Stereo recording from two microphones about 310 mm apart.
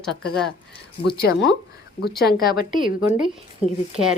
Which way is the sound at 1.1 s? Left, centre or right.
Left.